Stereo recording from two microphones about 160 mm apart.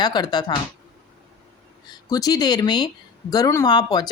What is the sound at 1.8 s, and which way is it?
Speech, 25° left (ahead or behind).